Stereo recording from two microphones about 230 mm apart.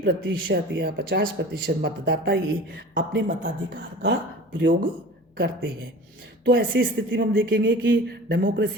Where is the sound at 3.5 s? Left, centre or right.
Right.